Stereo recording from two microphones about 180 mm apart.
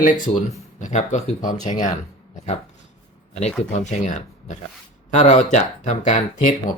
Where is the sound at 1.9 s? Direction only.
45° left (ahead or behind).